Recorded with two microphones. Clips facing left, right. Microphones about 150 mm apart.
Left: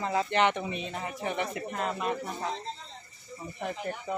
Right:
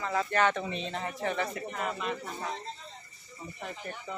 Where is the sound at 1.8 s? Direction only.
40° left (ahead or behind).